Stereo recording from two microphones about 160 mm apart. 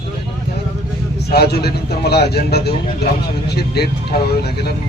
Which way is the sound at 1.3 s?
80° left.